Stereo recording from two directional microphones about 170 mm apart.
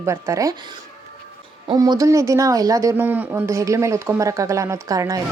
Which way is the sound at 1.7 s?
20° right (ahead or behind).